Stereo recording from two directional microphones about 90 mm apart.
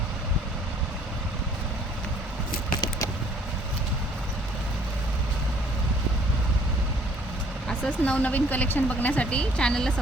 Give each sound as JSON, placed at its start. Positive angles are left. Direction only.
{"t": 7.7, "sound": "speech", "side_deg": 15}